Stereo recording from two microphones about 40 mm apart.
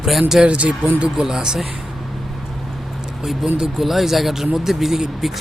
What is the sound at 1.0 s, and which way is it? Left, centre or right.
Speech, centre.